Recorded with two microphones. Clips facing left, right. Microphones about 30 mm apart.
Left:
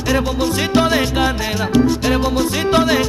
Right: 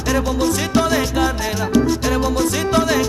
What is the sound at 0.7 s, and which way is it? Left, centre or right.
Salsa music, left.